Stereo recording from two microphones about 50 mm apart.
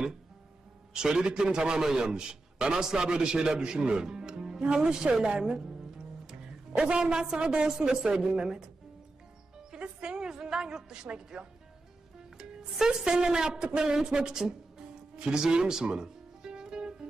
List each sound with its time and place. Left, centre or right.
0.9 s a man's voice: centre
9.8 s music: centre
12.4 s a woman's voice: centre
15.1 s music: centre